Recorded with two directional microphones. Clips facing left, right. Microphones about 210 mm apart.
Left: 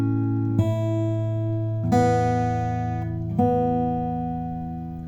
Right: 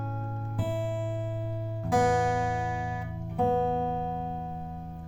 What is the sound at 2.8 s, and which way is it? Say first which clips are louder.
Music: left 7 dB; 55° left (ahead or behind).